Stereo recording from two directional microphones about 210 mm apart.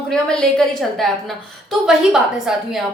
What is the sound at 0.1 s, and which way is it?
A woman's voice, 5° left (ahead or behind).